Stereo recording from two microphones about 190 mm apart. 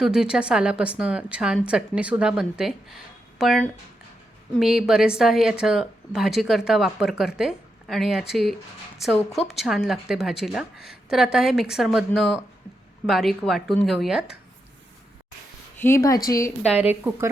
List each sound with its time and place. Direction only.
0.0 s a woman's voice: 5° right (ahead or behind)
15.8 s speech: 15° left (ahead or behind)
16.7 s a woman's voice: 5° right (ahead or behind)